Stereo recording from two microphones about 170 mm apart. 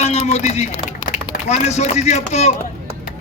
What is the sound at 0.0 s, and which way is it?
A man's voice, 40° left (ahead or behind).